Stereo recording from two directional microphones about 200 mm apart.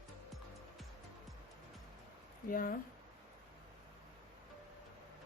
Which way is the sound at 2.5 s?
45° left (ahead or behind).